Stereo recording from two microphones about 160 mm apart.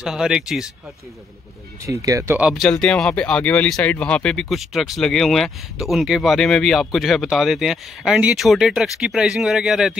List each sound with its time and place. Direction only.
0.0 s speech: 5° right (ahead or behind)
1.9 s speech: 20° right (ahead or behind)
2.4 s speech: centre (ahead or behind)